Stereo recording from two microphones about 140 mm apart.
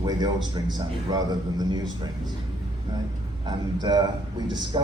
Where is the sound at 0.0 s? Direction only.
30° right (ahead or behind).